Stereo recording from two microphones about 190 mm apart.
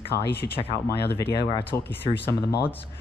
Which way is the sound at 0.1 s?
60° left (ahead or behind).